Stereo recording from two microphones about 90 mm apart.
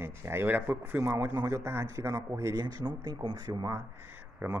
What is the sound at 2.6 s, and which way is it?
Speech, 50° right (ahead or behind).